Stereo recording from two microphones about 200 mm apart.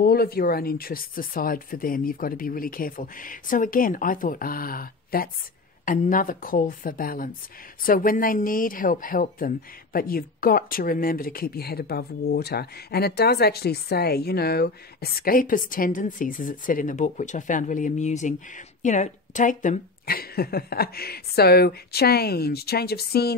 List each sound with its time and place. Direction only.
0.0 s speech: 50° left (ahead or behind)